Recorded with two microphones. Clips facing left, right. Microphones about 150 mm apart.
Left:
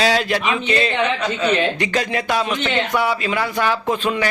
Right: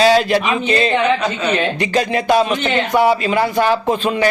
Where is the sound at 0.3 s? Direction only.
30° right (ahead or behind).